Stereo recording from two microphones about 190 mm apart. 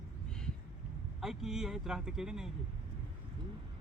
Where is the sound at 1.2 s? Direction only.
Centre (ahead or behind).